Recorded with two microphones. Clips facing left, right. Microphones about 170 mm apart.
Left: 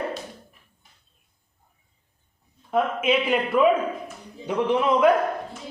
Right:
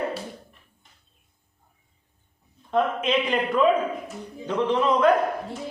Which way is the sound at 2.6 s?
5° left (ahead or behind).